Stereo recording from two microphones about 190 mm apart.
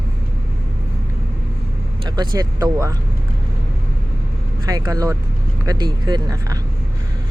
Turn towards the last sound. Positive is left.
turn(degrees=-20)  # may be behind; listen again after turning